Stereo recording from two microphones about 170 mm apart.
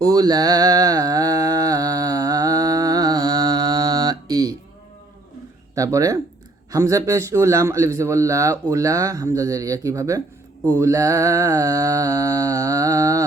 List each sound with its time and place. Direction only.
0.0 s mantra: 20° right (ahead or behind)
5.7 s a man's voice: 20° right (ahead or behind)
8.7 s mantra: 20° right (ahead or behind)